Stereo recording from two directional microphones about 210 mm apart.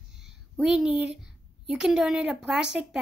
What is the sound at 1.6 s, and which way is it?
A woman's voice, 5° right (ahead or behind).